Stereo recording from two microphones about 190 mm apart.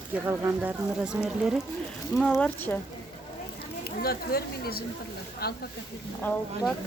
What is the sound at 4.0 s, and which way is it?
Speech, 55° left (ahead or behind).